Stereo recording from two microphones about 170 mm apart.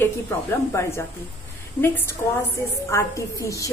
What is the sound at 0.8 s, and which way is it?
Speech, 15° left (ahead or behind).